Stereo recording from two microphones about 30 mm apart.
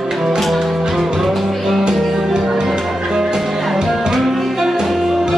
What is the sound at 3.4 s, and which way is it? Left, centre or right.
Music, centre.